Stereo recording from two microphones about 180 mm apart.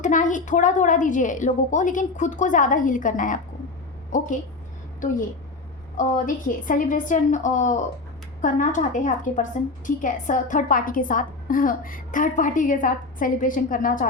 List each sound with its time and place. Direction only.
0.0 s a woman's voice: 45° left (ahead or behind)
6.0 s a woman's voice: 50° left (ahead or behind)